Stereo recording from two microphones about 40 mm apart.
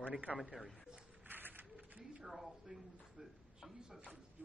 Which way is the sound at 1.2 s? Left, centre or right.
Right.